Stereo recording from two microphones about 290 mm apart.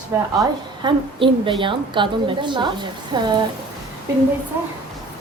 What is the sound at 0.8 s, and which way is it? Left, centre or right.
A woman's voice, centre.